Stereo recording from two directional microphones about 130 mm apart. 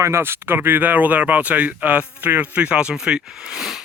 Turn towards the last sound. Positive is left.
turn(degrees=-5)  # may be behind; listen again after turning